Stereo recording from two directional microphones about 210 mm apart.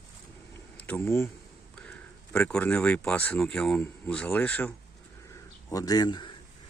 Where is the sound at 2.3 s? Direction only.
5° left (ahead or behind).